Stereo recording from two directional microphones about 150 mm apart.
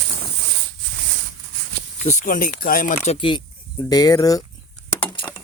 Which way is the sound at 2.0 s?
60° left (ahead or behind).